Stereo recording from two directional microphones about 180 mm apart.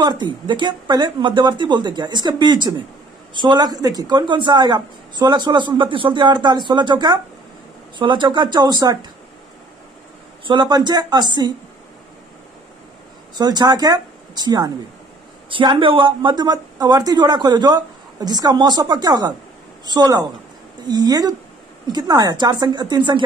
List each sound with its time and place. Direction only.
0.0 s a woman's voice: 25° right (ahead or behind)
10.4 s a woman's voice: 25° right (ahead or behind)
13.4 s a woman's voice: 25° right (ahead or behind)